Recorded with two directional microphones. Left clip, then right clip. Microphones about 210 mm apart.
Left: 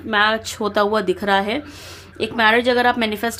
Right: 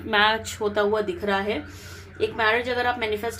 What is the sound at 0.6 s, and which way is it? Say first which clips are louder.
A woman's voice: left 5 dB; 40° left (ahead or behind).